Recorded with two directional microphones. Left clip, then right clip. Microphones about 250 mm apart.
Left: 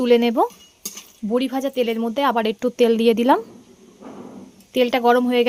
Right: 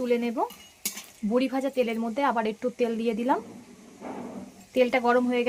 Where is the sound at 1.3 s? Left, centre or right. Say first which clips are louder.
Left 4 dB; left.